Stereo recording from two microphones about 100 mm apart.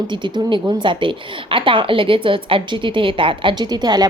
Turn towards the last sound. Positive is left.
turn(degrees=-45)  # may be behind; listen again after turning